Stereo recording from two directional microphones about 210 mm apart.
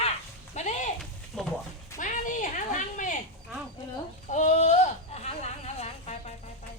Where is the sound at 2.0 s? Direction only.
35° left (ahead or behind).